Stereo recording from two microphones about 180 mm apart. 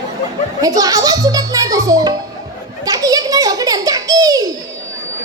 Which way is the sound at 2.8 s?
20° right (ahead or behind).